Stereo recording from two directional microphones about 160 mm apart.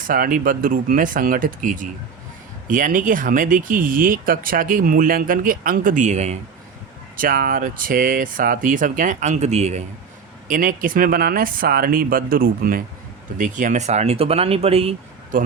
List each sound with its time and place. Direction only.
0.1 s speech: 60° right (ahead or behind); by 6.3 s 45° right (ahead or behind)
7.2 s speech: 60° right (ahead or behind); by 9.8 s 45° right (ahead or behind)
10.5 s speech: 60° right (ahead or behind)
13.4 s speech: 55° right (ahead or behind)